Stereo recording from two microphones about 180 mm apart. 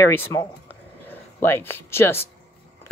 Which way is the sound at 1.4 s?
15° left (ahead or behind).